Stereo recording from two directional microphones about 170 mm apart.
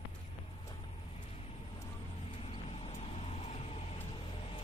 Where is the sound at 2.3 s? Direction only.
30° left (ahead or behind).